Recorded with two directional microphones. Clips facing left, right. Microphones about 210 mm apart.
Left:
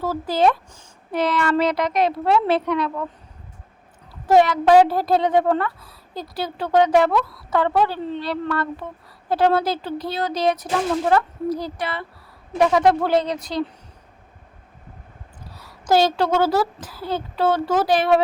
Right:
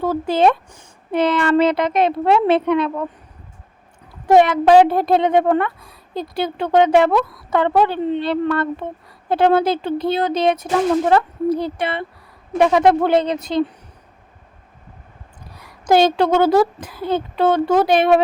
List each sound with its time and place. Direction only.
0.0 s a woman's voice: 25° right (ahead or behind)
4.3 s a woman's voice: 20° right (ahead or behind)
15.9 s a woman's voice: 20° right (ahead or behind)